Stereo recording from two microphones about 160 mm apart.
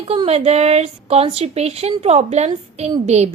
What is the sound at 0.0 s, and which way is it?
A woman's voice, 35° right (ahead or behind).